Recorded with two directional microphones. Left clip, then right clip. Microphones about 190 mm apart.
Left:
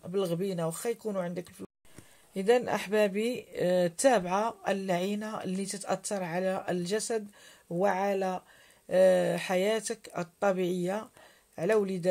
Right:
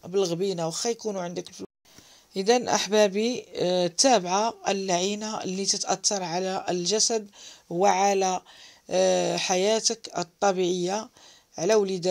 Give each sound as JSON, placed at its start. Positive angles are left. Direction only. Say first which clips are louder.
{"t": 0.0, "sound": "speech", "louder": "right 6 dB", "side_deg": -30}